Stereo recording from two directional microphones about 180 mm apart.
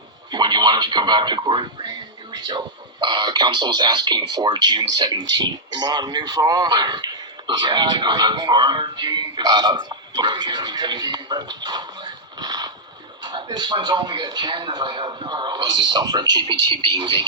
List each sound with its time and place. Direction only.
0.3 s speech: 25° right (ahead or behind)